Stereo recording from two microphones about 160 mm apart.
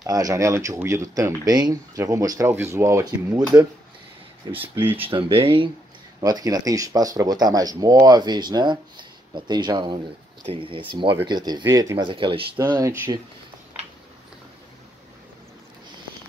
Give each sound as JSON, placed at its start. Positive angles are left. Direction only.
{"t": 0.0, "sound": "speech", "side_deg": -20}
{"t": 4.5, "sound": "speech", "side_deg": -10}
{"t": 5.1, "sound": "speech", "side_deg": -35}
{"t": 6.2, "sound": "speech", "side_deg": -25}
{"t": 12.5, "sound": "speech", "side_deg": -20}